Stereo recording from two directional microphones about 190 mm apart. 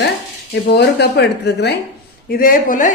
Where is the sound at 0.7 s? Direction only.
60° left (ahead or behind).